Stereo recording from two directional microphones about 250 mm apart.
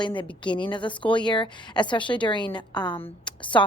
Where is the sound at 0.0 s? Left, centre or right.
Centre.